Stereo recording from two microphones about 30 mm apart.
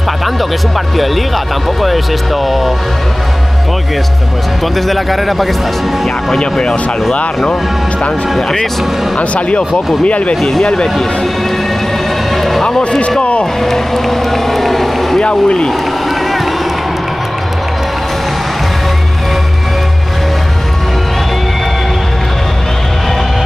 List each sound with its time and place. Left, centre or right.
1.8 s speech: centre
4.7 s speech: centre
9.2 s speech: left
10.6 s speech: left
12.4 s music: centre
13.2 s speech: left
13.6 s boat: centre
15.1 s speech: left